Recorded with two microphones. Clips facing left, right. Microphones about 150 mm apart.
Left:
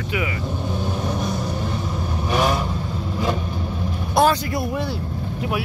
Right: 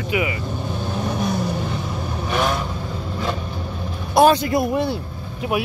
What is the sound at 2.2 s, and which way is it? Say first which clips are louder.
Vehicle: left 1 dB; 10° left (ahead or behind).